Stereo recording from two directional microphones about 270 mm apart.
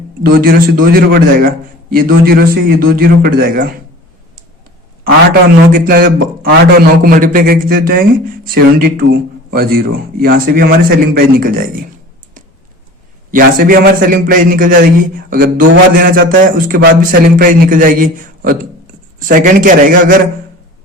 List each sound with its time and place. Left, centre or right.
0.2 s a man's voice: right
5.7 s a man's voice: right
13.3 s a man's voice: right